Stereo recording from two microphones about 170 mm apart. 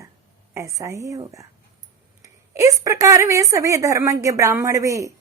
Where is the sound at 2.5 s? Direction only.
20° right (ahead or behind).